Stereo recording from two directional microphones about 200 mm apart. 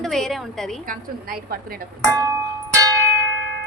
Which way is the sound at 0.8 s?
50° right (ahead or behind).